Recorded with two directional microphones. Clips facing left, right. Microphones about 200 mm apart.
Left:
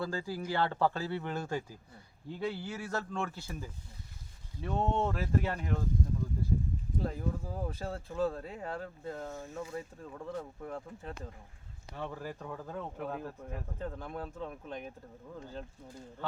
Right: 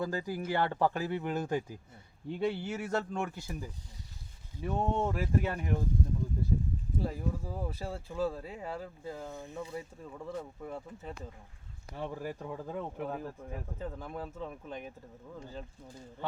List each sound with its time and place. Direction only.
0.0 s speech: 15° right (ahead or behind)
7.0 s speech: 5° right (ahead or behind)
11.9 s speech: 15° right (ahead or behind)
13.1 s speech: centre (ahead or behind)